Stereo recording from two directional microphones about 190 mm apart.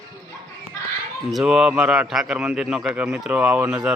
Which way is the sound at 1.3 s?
5° right (ahead or behind).